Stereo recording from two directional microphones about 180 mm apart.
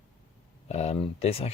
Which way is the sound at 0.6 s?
35° left (ahead or behind).